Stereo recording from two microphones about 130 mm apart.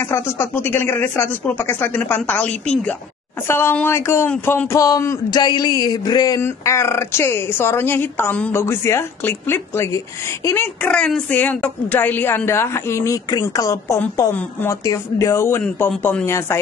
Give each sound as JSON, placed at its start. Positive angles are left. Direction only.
{"t": 0.0, "sound": "speech", "side_deg": 20}
{"t": 3.4, "sound": "a woman's voice", "side_deg": 20}
{"t": 6.4, "sound": "a woman's voice", "side_deg": 20}
{"t": 15.6, "sound": "speech", "side_deg": 10}